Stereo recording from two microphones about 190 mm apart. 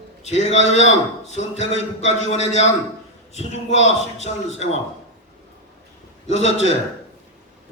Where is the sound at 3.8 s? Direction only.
35° left (ahead or behind).